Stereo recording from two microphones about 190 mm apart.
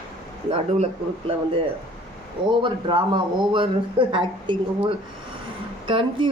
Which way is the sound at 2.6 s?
25° right (ahead or behind).